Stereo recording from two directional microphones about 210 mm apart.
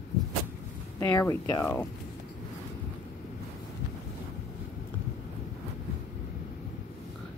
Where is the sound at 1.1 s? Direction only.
15° left (ahead or behind).